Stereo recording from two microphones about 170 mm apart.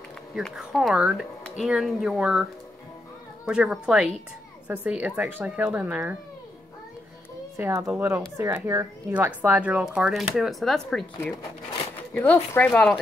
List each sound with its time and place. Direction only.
0.3 s speech: centre (ahead or behind)
3.4 s speech: 5° right (ahead or behind)
7.5 s speech: 15° right (ahead or behind); by 11.1 s centre (ahead or behind)
12.1 s speech: 10° left (ahead or behind)